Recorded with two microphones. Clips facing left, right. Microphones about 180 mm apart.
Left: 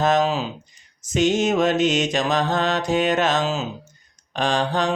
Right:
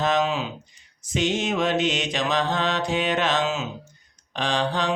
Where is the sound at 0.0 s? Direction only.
45° left (ahead or behind).